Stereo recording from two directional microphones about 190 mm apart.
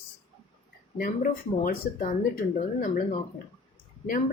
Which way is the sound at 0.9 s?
45° left (ahead or behind).